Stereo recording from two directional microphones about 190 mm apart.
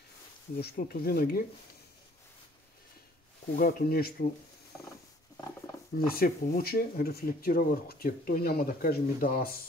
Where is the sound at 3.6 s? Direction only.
50° left (ahead or behind).